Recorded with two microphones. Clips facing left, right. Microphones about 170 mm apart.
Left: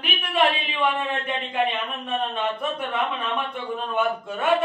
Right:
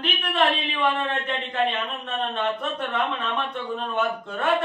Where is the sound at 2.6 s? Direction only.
10° left (ahead or behind).